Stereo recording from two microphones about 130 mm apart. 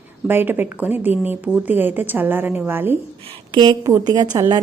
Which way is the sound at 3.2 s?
50° right (ahead or behind).